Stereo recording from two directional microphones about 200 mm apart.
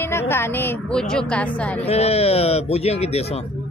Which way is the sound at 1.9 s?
30° left (ahead or behind).